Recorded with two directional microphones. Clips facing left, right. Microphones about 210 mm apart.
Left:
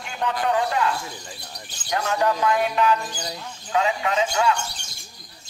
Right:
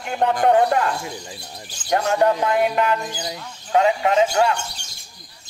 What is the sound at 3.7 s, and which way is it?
Speech, 40° right (ahead or behind).